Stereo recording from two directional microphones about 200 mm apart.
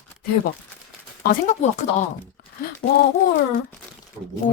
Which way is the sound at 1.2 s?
40° left (ahead or behind).